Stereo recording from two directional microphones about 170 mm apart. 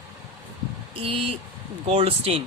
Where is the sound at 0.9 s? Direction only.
35° right (ahead or behind).